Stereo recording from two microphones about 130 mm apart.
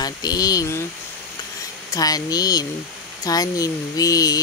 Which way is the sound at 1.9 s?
30° left (ahead or behind).